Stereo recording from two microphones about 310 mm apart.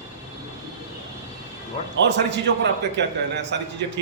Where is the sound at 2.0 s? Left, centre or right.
Right.